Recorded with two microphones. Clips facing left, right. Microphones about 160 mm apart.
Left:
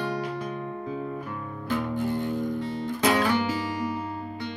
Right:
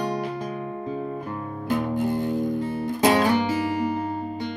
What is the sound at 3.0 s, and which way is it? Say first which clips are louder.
Music: right 4 dB; 30° right (ahead or behind).